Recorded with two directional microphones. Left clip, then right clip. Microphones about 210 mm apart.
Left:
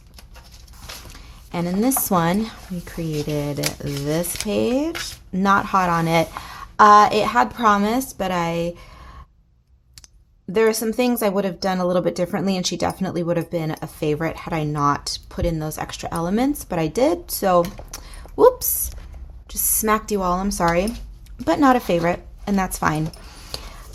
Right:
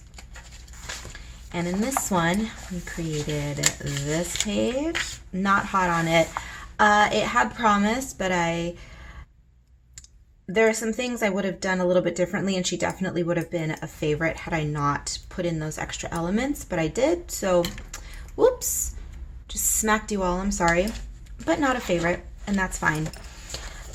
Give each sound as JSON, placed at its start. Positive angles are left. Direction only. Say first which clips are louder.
{"t": 1.5, "sound": "speech", "louder": "left 4 dB", "side_deg": 40}
{"t": 3.6, "sound": "speech", "louder": "left 1 dB", "side_deg": 20}
{"t": 4.4, "sound": "speech", "louder": "left 8 dB", "side_deg": 40}
{"t": 10.5, "sound": "speech", "louder": "left 3 dB", "side_deg": 35}
{"t": 17.9, "sound": "a sound", "louder": "left 7 dB", "side_deg": 35}
{"t": 19.5, "sound": "speech", "louder": "left 3 dB", "side_deg": 30}